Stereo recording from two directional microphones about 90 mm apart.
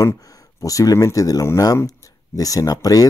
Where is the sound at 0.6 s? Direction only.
40° left (ahead or behind).